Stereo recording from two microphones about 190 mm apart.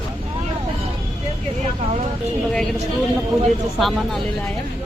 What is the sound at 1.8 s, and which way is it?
Vehicle, 30° right (ahead or behind).